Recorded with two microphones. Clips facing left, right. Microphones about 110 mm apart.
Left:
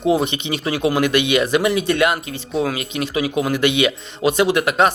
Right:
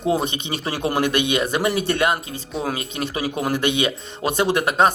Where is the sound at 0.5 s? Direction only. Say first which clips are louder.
Left 4 dB; 30° right (ahead or behind).